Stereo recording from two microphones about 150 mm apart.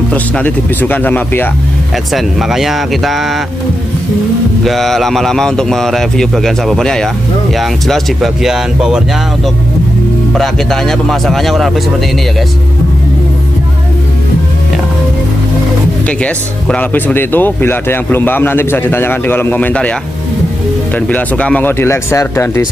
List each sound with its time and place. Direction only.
0.1 s speech: 10° left (ahead or behind)
2.1 s speech: centre (ahead or behind)
4.6 s speech: centre (ahead or behind)
10.3 s speech: centre (ahead or behind)
16.1 s speech: 10° left (ahead or behind)
21.1 s speech: 10° left (ahead or behind)